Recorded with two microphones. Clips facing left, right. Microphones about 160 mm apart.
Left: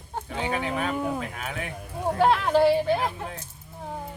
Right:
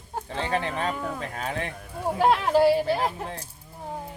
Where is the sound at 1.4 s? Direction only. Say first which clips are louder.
Right 3 dB; 35° right (ahead or behind).